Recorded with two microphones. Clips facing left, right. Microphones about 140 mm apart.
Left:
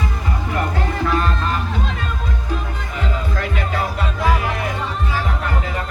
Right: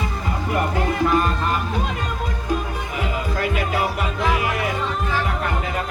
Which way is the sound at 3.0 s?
10° right (ahead or behind).